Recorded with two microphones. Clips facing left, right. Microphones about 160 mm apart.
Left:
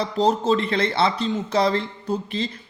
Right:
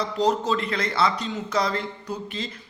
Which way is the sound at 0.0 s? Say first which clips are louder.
Left 2 dB; 30° left (ahead or behind).